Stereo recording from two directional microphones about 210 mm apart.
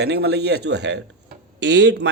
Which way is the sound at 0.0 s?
50° right (ahead or behind).